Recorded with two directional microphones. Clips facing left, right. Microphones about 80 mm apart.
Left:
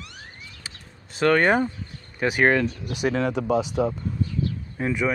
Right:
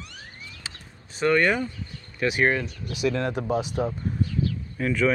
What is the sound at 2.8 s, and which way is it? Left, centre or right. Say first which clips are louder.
Speech: left 1 dB; left.